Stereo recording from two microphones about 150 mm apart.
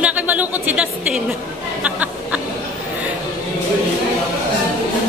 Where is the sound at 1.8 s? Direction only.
10° right (ahead or behind).